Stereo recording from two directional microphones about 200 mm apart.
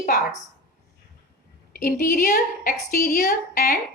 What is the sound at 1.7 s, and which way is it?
A woman's voice, 45° left (ahead or behind).